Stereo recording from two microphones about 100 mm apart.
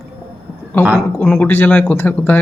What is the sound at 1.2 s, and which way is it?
Speech, 15° left (ahead or behind).